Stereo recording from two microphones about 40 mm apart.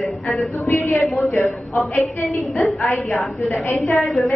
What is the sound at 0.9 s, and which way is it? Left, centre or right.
A woman's voice, centre.